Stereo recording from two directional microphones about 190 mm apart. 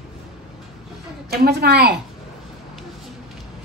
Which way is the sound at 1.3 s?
55° right (ahead or behind).